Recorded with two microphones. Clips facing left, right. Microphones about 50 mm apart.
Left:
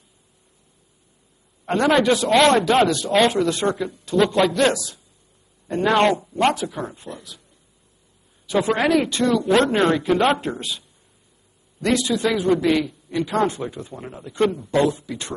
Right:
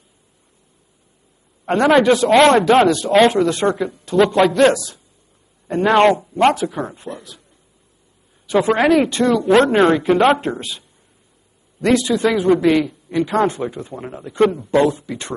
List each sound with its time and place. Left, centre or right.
1.7 s speech: centre
8.5 s a woman's voice: centre